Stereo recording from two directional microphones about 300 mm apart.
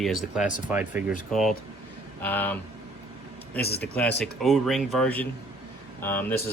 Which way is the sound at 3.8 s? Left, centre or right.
Centre.